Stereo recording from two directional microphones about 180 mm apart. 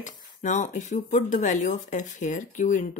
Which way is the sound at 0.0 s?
45° left (ahead or behind).